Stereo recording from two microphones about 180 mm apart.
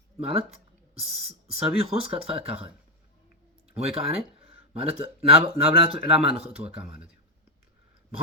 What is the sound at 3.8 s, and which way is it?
Speech, 35° right (ahead or behind).